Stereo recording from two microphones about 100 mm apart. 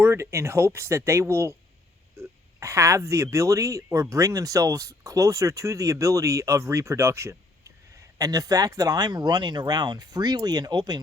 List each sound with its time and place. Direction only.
0.0 s speech: 25° right (ahead or behind); by 11.0 s 45° right (ahead or behind)